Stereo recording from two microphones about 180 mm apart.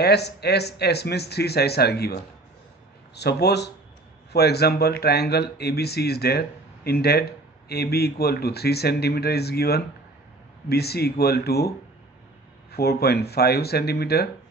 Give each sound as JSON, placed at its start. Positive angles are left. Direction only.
{"t": 0.0, "sound": "speech", "side_deg": 65}
{"t": 3.2, "sound": "speech", "side_deg": 65}
{"t": 12.7, "sound": "speech", "side_deg": 60}